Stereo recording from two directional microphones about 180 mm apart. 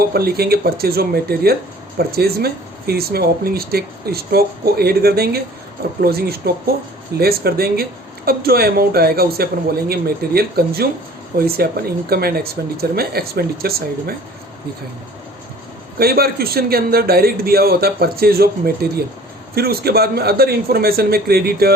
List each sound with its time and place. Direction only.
0.0 s speech: 60° right (ahead or behind)
16.0 s speech: 60° right (ahead or behind)